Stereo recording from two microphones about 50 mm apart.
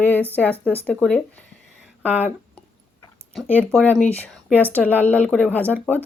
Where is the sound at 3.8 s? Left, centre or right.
Left.